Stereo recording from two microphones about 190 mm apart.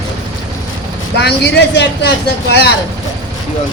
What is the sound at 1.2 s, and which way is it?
A man's voice, 60° left (ahead or behind).